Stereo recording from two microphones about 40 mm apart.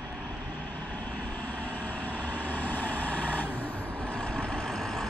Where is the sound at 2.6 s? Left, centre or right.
Left.